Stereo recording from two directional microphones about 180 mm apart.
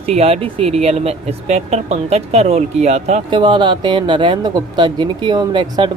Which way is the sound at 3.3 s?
25° right (ahead or behind).